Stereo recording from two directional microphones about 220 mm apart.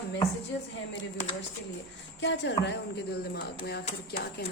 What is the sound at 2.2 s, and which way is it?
Speech, 55° left (ahead or behind).